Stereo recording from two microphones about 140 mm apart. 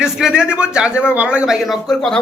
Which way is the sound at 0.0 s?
5° right (ahead or behind).